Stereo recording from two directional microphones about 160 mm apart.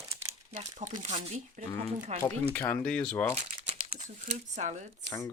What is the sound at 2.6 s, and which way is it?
Speech, 10° left (ahead or behind).